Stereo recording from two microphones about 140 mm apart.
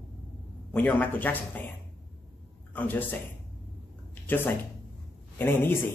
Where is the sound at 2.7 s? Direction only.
10° left (ahead or behind).